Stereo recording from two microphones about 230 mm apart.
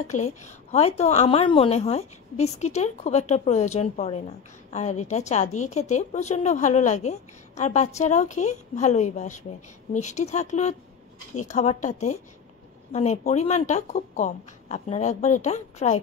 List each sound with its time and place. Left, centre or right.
0.1 s a woman's voice: left